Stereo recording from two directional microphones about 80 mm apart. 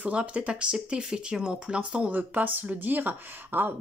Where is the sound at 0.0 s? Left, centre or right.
Centre.